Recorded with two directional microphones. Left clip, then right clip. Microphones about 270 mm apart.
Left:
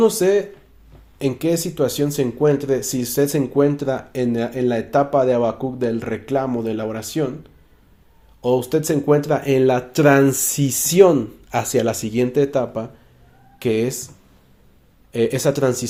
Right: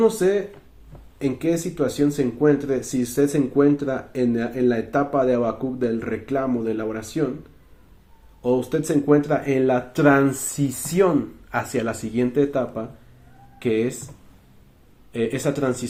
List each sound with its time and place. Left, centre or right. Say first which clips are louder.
0.0 s speech: left 3 dB; left
8.4 s speech: left 3 dB; left
15.1 s speech: left 5 dB; left